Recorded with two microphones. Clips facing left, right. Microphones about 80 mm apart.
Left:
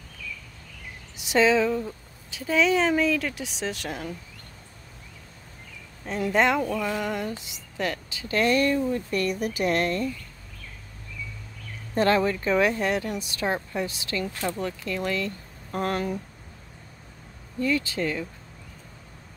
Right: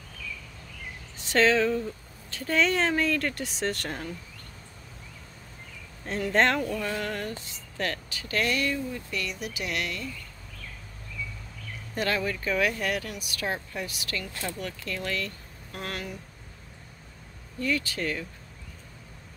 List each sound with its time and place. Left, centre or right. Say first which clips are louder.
1.1 s speech: left 2 dB; centre
6.3 s speech: left 2 dB; centre
6.8 s a sound: left 3 dB; centre
7.7 s speech: left 2 dB; centre; by 10.0 s left
11.9 s speech: left 7 dB; left
15.7 s speech: left 9 dB; left
17.6 s speech: left 4 dB; left